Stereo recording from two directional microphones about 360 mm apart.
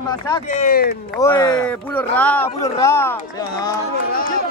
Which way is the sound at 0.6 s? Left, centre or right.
Left.